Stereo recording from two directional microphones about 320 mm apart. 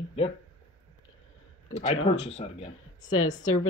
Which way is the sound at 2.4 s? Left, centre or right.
Centre.